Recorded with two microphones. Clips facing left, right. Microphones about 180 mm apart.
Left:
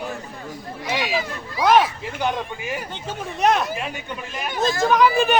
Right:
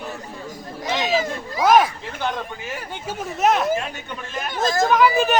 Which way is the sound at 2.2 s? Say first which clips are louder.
Left 2 dB; 15° left (ahead or behind).